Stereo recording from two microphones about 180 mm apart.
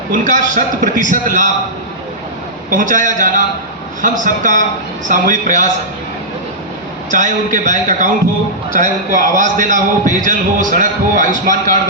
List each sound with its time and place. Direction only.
0.1 s a man's voice: 45° right (ahead or behind)
2.6 s a man's voice: 45° right (ahead or behind)
7.1 s a man's voice: 45° right (ahead or behind)